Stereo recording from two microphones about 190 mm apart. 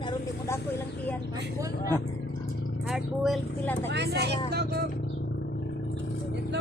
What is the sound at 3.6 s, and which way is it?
Speech, 10° left (ahead or behind).